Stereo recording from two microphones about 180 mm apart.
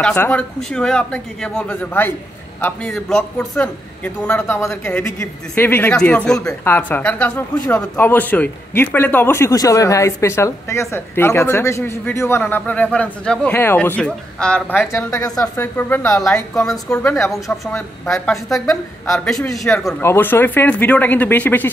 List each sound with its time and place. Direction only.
0.0 s a man's voice: 5° left (ahead or behind)
16.7 s speech: 5° left (ahead or behind)
18.5 s a man's voice: 20° left (ahead or behind)
19.1 s speech: 5° left (ahead or behind)
20.0 s a man's voice: 10° left (ahead or behind)